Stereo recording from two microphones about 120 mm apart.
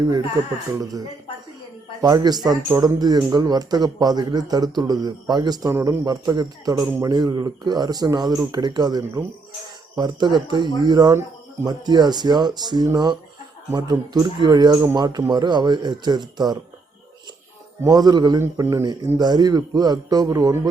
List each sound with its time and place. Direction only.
2.0 s speech: 30° right (ahead or behind)
5.7 s a man's voice: 20° right (ahead or behind)
6.1 s speech: 35° right (ahead or behind)
17.8 s speech: 35° right (ahead or behind)